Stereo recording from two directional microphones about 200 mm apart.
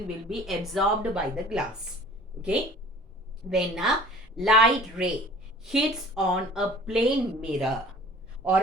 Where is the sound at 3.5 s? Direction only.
Centre (ahead or behind).